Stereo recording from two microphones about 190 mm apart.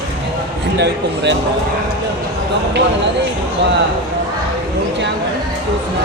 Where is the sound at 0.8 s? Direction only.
65° right (ahead or behind).